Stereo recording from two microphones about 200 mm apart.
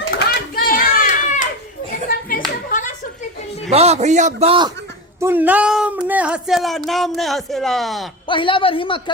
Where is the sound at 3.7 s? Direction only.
30° right (ahead or behind).